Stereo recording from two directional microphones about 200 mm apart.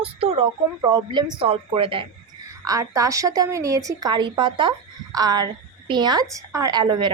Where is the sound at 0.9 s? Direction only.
20° right (ahead or behind).